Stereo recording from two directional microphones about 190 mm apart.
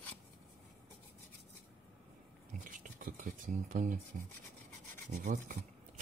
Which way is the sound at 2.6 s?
45° right (ahead or behind).